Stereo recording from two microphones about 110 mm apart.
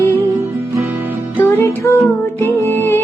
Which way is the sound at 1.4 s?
20° left (ahead or behind).